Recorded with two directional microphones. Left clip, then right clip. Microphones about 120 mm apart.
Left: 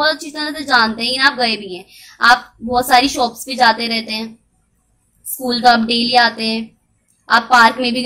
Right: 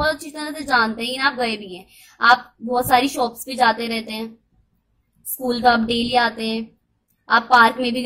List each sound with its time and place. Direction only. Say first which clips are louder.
0.0 s a woman's voice: left 5 dB; 20° right (ahead or behind)
5.4 s a woman's voice: left 5 dB; 15° right (ahead or behind)